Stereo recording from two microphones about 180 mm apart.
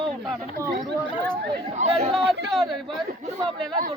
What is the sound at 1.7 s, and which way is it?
Speech, 40° right (ahead or behind).